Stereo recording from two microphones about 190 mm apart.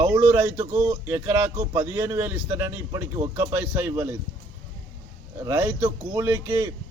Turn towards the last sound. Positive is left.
turn(degrees=-10)  # may be behind; listen again after turning